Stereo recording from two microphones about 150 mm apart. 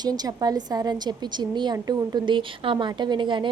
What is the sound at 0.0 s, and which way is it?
Speech, 25° right (ahead or behind).